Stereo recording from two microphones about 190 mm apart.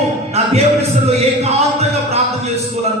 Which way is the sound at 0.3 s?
35° right (ahead or behind).